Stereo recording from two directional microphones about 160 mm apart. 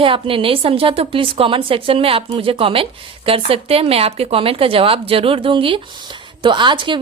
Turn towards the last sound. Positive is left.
turn(degrees=-30)  # may be behind; listen again after turning